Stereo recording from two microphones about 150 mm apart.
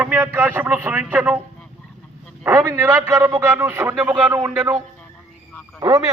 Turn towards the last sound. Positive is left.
turn(degrees=-25)  # may be behind; listen again after turning